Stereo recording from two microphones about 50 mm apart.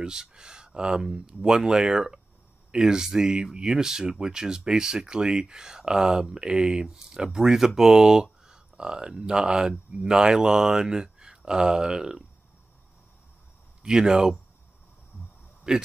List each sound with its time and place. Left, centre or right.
0.0 s speech: centre
13.8 s speech: centre
15.7 s speech: centre